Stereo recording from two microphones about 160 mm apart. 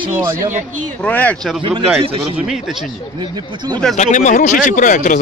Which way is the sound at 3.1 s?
25° right (ahead or behind).